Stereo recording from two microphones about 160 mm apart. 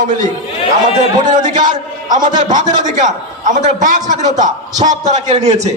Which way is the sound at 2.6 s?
50° right (ahead or behind).